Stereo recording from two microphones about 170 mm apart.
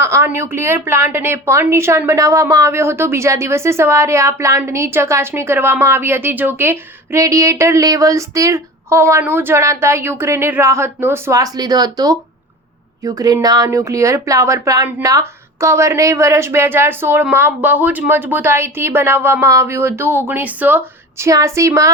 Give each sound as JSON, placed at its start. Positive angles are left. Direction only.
{"t": 0.0, "sound": "a woman's voice", "side_deg": -15}